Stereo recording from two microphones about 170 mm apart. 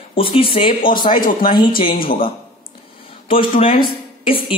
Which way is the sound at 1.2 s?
55° left (ahead or behind).